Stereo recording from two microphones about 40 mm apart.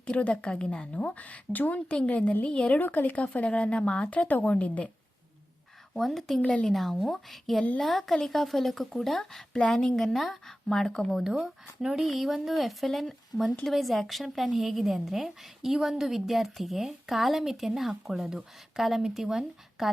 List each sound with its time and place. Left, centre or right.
0.1 s a woman's voice: left
0.9 s speech: left
2.8 s speech: left
5.9 s a woman's voice: centre
9.5 s a woman's voice: centre
11.2 s speech: centre
12.0 s a woman's voice: centre